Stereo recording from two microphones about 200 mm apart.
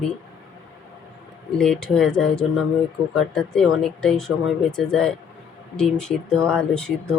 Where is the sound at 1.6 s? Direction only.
5° left (ahead or behind).